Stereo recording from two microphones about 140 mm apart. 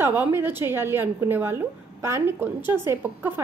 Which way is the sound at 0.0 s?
15° right (ahead or behind).